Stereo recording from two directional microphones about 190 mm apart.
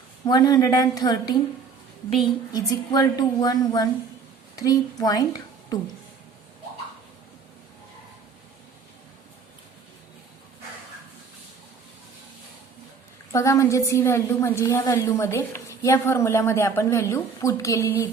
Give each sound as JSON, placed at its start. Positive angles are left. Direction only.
{"t": 0.3, "sound": "a woman's voice", "side_deg": 20}
{"t": 2.5, "sound": "a woman's voice", "side_deg": 20}
{"t": 13.3, "sound": "a woman's voice", "side_deg": 15}